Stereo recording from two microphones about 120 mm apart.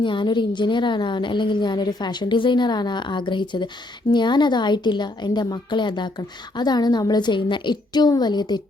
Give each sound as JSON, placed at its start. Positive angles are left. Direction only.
{"t": 0.0, "sound": "a woman's voice", "side_deg": 40}